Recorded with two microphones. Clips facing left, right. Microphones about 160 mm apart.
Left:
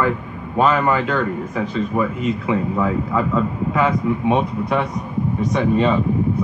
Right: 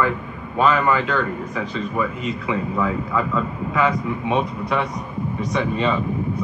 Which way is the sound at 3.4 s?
45° left (ahead or behind).